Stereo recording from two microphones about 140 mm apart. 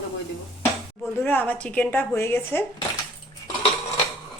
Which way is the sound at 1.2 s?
10° left (ahead or behind).